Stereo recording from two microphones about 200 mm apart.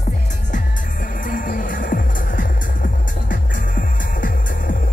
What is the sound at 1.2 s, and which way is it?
Music, 45° left (ahead or behind).